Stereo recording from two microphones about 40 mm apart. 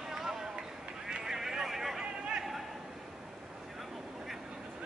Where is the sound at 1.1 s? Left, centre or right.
Centre.